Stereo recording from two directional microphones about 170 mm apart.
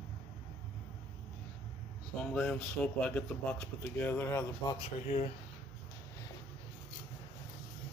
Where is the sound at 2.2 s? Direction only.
5° left (ahead or behind).